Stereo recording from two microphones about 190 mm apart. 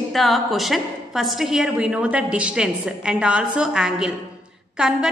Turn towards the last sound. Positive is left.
turn(degrees=-5)  # may be behind; listen again after turning